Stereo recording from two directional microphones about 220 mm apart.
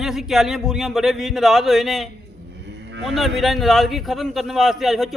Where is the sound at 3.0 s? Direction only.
Centre (ahead or behind).